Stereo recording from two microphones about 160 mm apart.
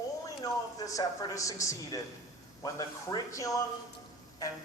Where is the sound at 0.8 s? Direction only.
20° left (ahead or behind).